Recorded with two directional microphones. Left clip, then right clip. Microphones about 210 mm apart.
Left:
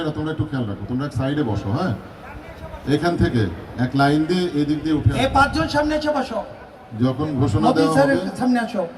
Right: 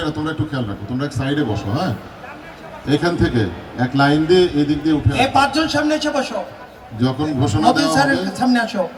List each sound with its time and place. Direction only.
0.0 s a man's voice: 15° right (ahead or behind)
0.9 s speech: centre (ahead or behind)
2.8 s a man's voice: 30° left (ahead or behind); by 6.3 s 5° right (ahead or behind)
7.0 s a man's voice: 20° right (ahead or behind); by 8.7 s 45° right (ahead or behind)